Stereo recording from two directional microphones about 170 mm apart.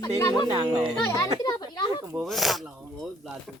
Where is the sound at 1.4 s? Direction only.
25° left (ahead or behind).